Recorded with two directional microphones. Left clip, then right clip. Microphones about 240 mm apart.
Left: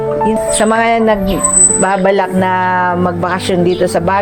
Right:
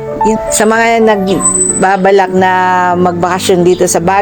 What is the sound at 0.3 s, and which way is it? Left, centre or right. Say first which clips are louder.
Speech: right 4 dB; right.